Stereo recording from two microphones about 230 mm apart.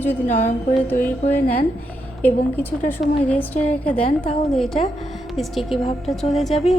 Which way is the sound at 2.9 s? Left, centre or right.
Centre.